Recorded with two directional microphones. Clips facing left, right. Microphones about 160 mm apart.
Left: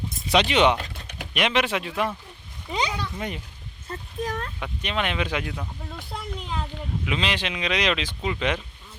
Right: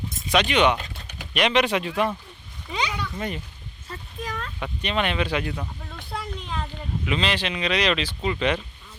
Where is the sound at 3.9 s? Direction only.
45° left (ahead or behind).